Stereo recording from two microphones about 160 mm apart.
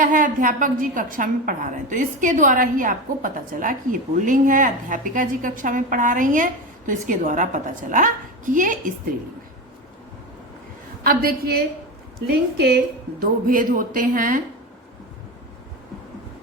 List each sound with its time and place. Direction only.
0.0 s a woman's voice: 55° right (ahead or behind)
11.0 s a woman's voice: 70° right (ahead or behind)